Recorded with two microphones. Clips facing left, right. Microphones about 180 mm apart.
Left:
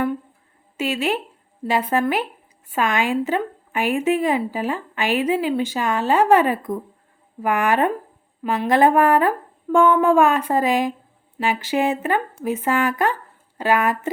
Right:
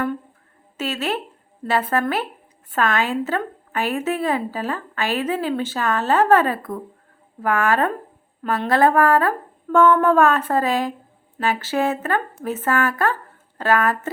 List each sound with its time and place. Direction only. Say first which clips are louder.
0.8 s a woman's voice: left 2 dB; 15° left (ahead or behind)